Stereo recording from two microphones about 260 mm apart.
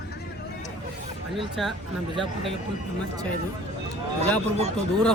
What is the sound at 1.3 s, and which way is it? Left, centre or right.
Speech, centre.